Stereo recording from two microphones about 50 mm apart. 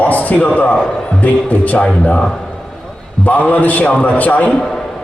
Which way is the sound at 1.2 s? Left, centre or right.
Left.